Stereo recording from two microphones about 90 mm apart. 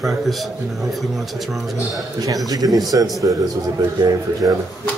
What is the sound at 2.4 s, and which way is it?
A man's voice, 45° right (ahead or behind).